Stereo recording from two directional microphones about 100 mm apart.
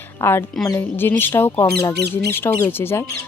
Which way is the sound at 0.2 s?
25° left (ahead or behind).